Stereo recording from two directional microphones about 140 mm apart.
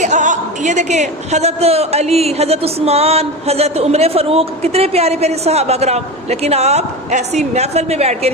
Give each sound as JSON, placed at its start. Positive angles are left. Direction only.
{"t": 0.0, "sound": "speech", "side_deg": -60}